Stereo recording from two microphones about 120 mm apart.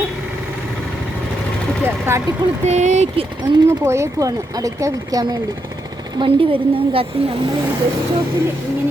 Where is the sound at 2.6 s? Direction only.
75° right (ahead or behind).